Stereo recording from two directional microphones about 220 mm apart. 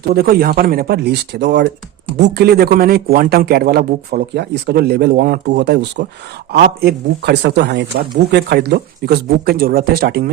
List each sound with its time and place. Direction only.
0.1 s speech: 45° right (ahead or behind)